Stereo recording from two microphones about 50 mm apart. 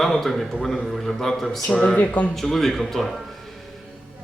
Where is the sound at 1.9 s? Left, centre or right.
Left.